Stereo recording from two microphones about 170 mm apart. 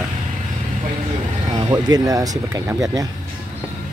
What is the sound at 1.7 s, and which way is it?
Speech, 20° right (ahead or behind).